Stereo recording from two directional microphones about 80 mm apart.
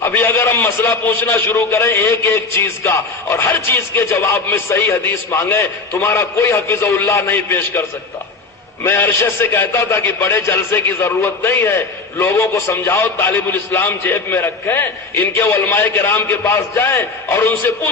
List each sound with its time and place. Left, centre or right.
0.0 s a sound: left
0.3 s a man's voice: left
1.5 s a man's voice: left